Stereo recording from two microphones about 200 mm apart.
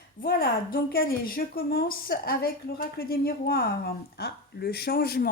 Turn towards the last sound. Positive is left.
turn(degrees=50)  # may be behind; listen again after turning